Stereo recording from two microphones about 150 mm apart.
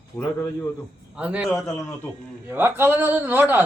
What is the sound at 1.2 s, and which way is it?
A man's voice, 10° right (ahead or behind).